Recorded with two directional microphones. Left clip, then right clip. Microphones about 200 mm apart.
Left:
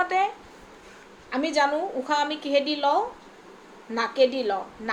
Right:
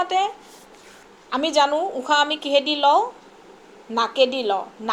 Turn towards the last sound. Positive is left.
turn(degrees=-20)  # may be behind; listen again after turning